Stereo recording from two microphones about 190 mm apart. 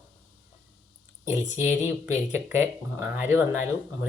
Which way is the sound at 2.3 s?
10° right (ahead or behind).